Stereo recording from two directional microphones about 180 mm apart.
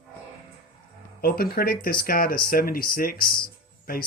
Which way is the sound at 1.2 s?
55° left (ahead or behind).